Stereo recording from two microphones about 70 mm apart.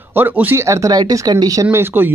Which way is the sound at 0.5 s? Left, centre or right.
Right.